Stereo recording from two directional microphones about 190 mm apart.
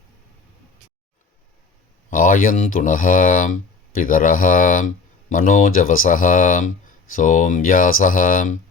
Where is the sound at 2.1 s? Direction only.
45° left (ahead or behind).